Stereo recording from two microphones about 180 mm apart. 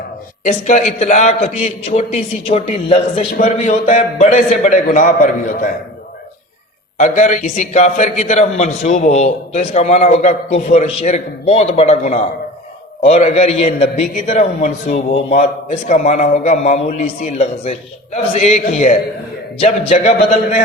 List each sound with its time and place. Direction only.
0.4 s a man's voice: 40° left (ahead or behind)
7.0 s a man's voice: 45° left (ahead or behind)